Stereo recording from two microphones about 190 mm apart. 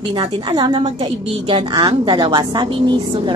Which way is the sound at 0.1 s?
25° right (ahead or behind).